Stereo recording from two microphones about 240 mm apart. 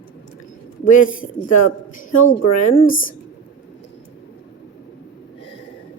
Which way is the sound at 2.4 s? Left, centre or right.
Left.